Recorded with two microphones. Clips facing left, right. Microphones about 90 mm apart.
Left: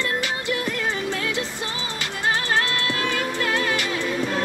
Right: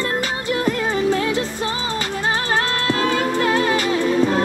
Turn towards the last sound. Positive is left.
turn(degrees=-35)  # may be behind; listen again after turning